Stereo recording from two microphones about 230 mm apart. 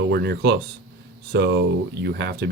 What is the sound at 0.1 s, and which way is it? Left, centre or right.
Speech, right.